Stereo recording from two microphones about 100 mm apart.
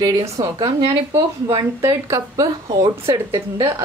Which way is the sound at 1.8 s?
30° right (ahead or behind).